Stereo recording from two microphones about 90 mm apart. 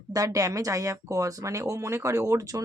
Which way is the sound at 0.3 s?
40° right (ahead or behind).